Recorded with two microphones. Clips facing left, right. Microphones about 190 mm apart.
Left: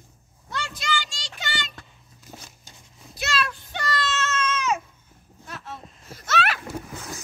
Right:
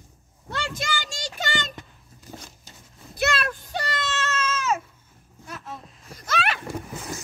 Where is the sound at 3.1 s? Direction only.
55° right (ahead or behind).